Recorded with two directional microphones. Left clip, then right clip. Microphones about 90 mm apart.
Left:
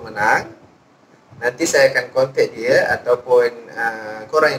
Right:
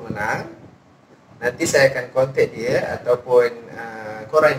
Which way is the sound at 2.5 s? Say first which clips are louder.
Left 6 dB; 35° left (ahead or behind).